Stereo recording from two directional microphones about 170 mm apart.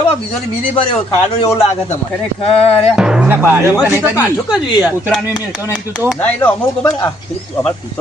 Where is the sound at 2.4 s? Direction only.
30° left (ahead or behind).